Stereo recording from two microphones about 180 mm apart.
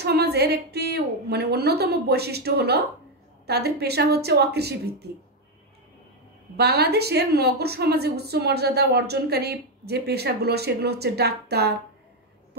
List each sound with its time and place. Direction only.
0.0 s a woman's voice: 60° right (ahead or behind)
6.5 s a woman's voice: 60° right (ahead or behind)